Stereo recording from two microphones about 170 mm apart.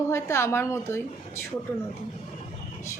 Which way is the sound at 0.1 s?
15° left (ahead or behind).